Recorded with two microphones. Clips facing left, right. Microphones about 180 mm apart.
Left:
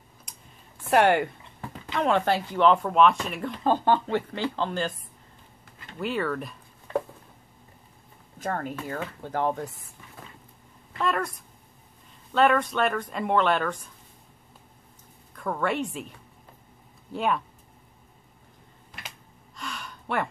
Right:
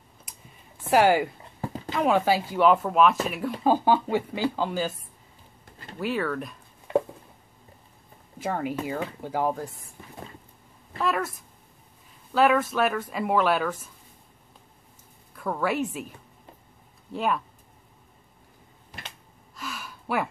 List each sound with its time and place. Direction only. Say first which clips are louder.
0.3 s a sound: even; 5° right (ahead or behind)
0.8 s speech: right 1 dB; 5° right (ahead or behind)
1.4 s a sound: right 6 dB; 35° right (ahead or behind)
1.9 s a woman's voice: right 1 dB; 5° right (ahead or behind)
5.9 s speech: right 1 dB; centre (ahead or behind)
8.4 s a woman's voice: right 2 dB; 10° right (ahead or behind)
11.0 s speech: even; 5° right (ahead or behind)
15.3 s a woman's voice: right 1 dB; 5° right (ahead or behind)
17.1 s speech: even; centre (ahead or behind)
19.5 s gasp: even; 5° right (ahead or behind)